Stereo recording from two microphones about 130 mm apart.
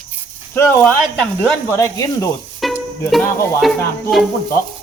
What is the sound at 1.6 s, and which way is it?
Speech, 20° left (ahead or behind).